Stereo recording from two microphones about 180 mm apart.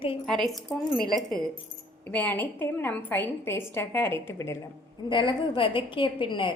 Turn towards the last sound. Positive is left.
turn(degrees=25)  # may be behind; listen again after turning